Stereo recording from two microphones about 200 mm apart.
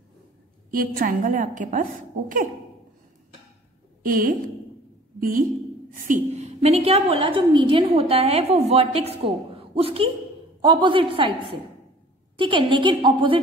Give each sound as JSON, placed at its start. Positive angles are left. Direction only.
{"t": 0.7, "sound": "a woman's voice", "side_deg": -45}
{"t": 4.0, "sound": "a woman's voice", "side_deg": -45}
{"t": 6.0, "sound": "a woman's voice", "side_deg": -35}